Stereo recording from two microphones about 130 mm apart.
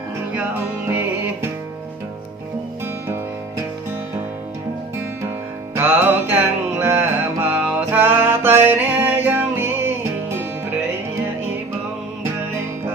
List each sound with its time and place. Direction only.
0.3 s music: 15° right (ahead or behind)
5.7 s music: 15° right (ahead or behind)